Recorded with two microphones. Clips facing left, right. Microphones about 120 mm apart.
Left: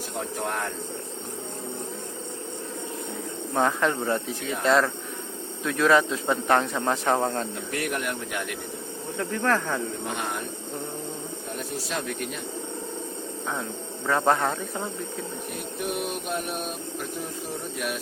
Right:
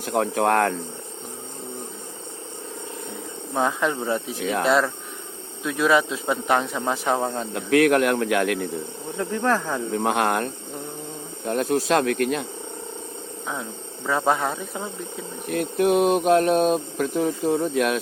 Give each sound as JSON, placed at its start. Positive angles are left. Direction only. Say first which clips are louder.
{"t": 0.1, "sound": "speech", "louder": "right 11 dB", "side_deg": -90}
{"t": 3.5, "sound": "speech", "louder": "right 1 dB", "side_deg": -10}
{"t": 7.5, "sound": "speech", "louder": "right 12 dB", "side_deg": -90}
{"t": 9.1, "sound": "speech", "louder": "right 2 dB", "side_deg": -15}
{"t": 9.9, "sound": "speech", "louder": "right 9 dB", "side_deg": -85}
{"t": 14.1, "sound": "speech", "louder": "right 1 dB", "side_deg": -5}
{"t": 15.4, "sound": "speech", "louder": "right 14 dB", "side_deg": -90}